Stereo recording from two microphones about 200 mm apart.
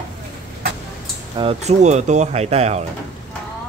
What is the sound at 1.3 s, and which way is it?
Speech, 30° right (ahead or behind).